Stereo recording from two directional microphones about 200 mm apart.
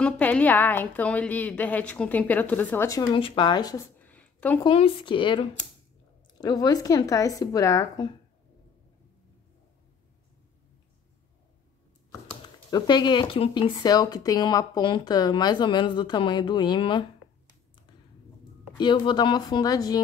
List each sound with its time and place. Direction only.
0.0 s a woman's voice: 10° left (ahead or behind)
4.0 s a sound: 5° left (ahead or behind)
4.6 s a woman's voice: 25° left (ahead or behind)
12.7 s speech: 20° left (ahead or behind)
18.8 s speech: 25° left (ahead or behind)